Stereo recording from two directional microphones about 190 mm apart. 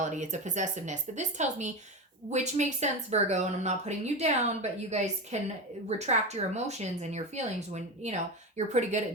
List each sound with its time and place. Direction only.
0.0 s speech: 40° right (ahead or behind)